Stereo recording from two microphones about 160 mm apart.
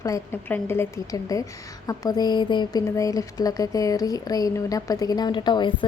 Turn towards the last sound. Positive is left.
turn(degrees=30)  # may be behind; listen again after turning